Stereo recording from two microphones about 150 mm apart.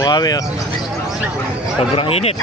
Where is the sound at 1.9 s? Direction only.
40° left (ahead or behind).